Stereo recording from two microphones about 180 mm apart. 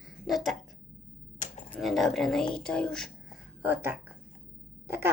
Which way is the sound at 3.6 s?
10° right (ahead or behind).